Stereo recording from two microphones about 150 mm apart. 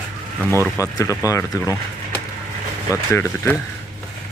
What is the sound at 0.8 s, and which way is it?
Speech, 20° left (ahead or behind).